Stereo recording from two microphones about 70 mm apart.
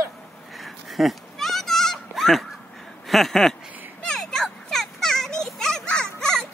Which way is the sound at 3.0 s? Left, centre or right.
Centre.